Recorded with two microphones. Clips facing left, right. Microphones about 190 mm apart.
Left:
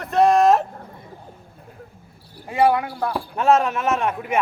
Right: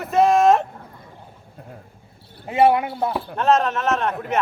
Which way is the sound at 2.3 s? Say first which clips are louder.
Right 2 dB; 20° right (ahead or behind).